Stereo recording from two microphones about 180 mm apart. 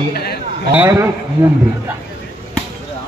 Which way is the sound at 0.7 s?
10° right (ahead or behind).